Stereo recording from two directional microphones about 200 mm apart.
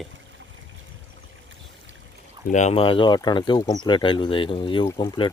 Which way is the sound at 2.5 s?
35° left (ahead or behind).